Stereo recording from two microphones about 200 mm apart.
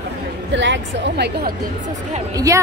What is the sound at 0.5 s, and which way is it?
A woman's voice, 65° right (ahead or behind).